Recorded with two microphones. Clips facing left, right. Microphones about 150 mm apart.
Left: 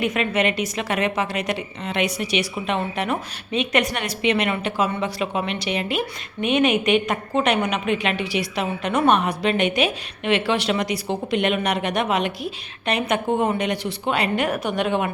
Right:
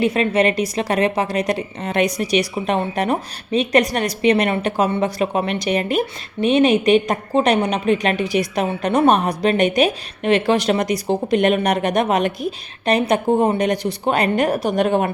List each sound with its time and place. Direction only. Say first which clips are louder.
0.0 s a woman's voice: right 5 dB; 35° right (ahead or behind)